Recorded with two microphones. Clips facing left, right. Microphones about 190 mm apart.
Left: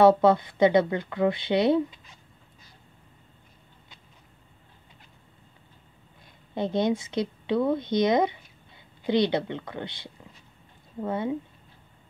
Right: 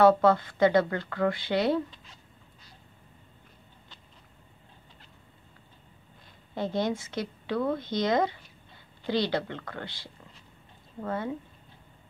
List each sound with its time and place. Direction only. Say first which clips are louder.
0.0 s speech: left 2 dB; 25° left (ahead or behind)
6.5 s speech: left 4 dB; 20° left (ahead or behind)